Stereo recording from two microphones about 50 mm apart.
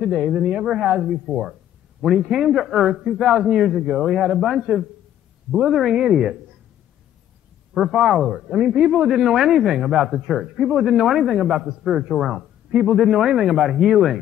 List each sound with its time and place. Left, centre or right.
0.2 s speech: right
0.7 s a man's voice: centre
1.2 s a man's voice: centre
7.7 s a man's voice: centre
12.2 s speech: centre